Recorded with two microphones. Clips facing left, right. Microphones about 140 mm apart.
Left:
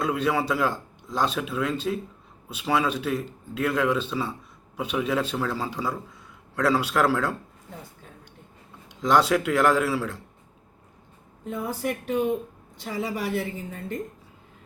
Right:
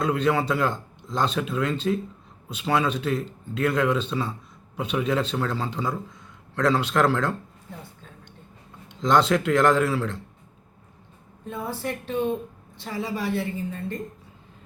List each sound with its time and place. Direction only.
0.0 s speech: 5° left (ahead or behind)
8.9 s speech: 10° left (ahead or behind)
11.8 s speech: 15° left (ahead or behind)